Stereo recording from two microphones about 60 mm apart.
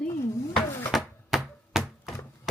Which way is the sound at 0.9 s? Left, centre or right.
Centre.